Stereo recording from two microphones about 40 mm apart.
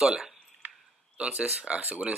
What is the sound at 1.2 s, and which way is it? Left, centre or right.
Speech, right.